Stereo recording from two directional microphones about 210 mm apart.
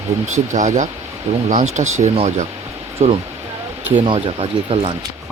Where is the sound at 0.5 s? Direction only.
35° right (ahead or behind).